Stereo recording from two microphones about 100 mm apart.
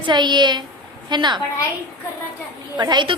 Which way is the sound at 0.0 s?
50° right (ahead or behind).